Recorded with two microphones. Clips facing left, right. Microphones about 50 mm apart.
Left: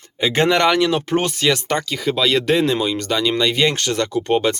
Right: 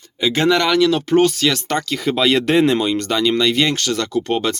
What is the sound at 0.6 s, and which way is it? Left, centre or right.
Speech, centre.